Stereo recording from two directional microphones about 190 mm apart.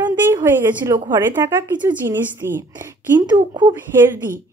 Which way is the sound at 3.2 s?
20° right (ahead or behind).